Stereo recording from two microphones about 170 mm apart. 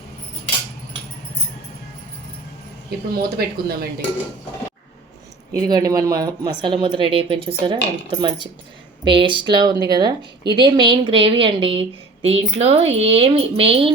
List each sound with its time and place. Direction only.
3.1 s speech: 65° right (ahead or behind)
5.5 s a woman's voice: 20° right (ahead or behind)